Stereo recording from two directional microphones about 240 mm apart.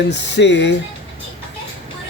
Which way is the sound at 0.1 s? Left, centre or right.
Left.